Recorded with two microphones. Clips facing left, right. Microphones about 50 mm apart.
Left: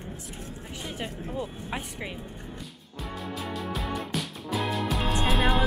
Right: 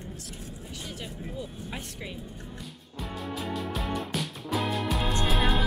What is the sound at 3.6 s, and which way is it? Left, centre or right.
Music, centre.